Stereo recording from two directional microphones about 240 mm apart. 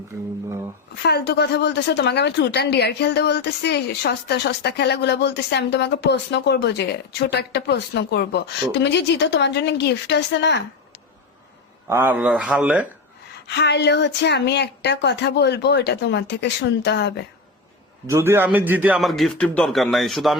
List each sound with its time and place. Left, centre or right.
0.1 s speech: centre
1.0 s speech: left
11.9 s a man's voice: centre
13.5 s speech: left
18.0 s a man's voice: centre